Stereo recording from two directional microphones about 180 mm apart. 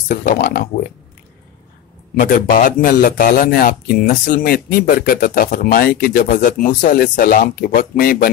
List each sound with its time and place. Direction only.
0.1 s a man's voice: 50° left (ahead or behind)
2.1 s a man's voice: 45° left (ahead or behind)